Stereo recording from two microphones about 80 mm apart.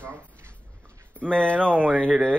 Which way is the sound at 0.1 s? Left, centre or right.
Centre.